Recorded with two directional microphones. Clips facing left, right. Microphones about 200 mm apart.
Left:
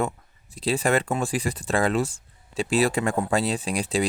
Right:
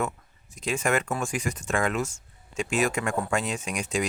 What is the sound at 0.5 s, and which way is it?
Speech, 35° left (ahead or behind).